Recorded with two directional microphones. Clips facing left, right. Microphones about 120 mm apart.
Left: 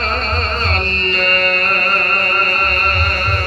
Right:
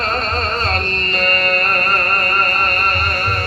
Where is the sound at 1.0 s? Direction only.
40° right (ahead or behind).